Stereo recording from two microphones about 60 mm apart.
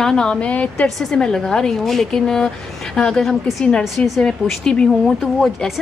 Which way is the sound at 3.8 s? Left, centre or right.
Centre.